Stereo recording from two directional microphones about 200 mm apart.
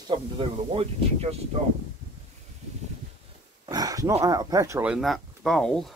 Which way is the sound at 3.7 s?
15° right (ahead or behind).